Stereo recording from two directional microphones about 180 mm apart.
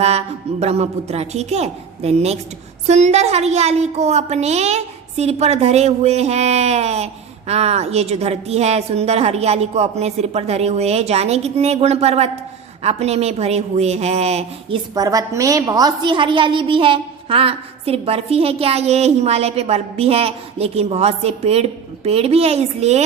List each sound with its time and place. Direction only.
0.0 s a woman's voice: 35° right (ahead or behind)
14.9 s a woman's voice: 20° right (ahead or behind); by 23.0 s 35° right (ahead or behind)